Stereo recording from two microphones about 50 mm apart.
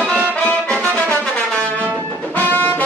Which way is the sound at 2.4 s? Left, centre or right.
Left.